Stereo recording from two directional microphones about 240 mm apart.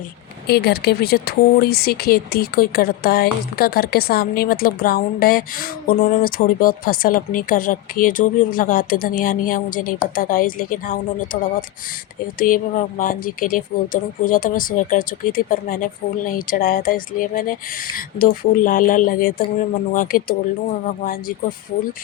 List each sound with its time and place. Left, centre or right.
0.4 s speech: left
12.4 s speech: left